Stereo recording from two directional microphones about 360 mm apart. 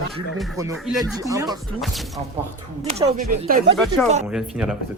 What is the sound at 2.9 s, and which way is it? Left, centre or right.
Speech, centre.